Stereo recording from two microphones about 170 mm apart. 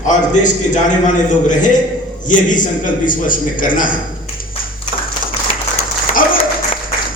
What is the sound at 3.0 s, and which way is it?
Speech, 50° left (ahead or behind).